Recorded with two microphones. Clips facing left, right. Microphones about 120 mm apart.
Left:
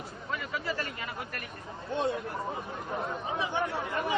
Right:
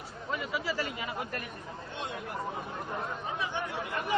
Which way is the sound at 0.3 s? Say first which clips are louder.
Right 1 dB; 15° right (ahead or behind).